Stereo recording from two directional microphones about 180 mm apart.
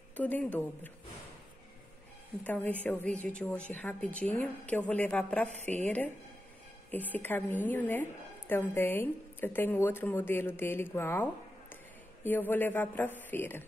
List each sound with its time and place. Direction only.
0.2 s a woman's voice: 10° left (ahead or behind)
2.4 s a woman's voice: 10° left (ahead or behind)